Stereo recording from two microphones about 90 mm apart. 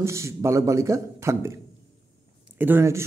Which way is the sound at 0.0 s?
30° right (ahead or behind).